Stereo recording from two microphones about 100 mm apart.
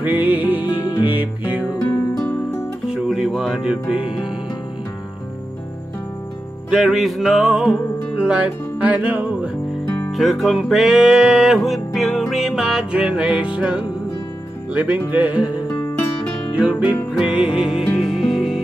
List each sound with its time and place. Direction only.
0.0 s music: 15° right (ahead or behind)
0.7 s music: 50° left (ahead or behind)
1.0 s music: 15° right (ahead or behind)
2.9 s music: 5° right (ahead or behind)
3.9 s music: 65° left (ahead or behind)
6.7 s music: 5° right (ahead or behind)
8.8 s music: 15° right (ahead or behind)
9.8 s music: 20° left (ahead or behind)
10.1 s music: centre (ahead or behind)
16.5 s music: 10° right (ahead or behind)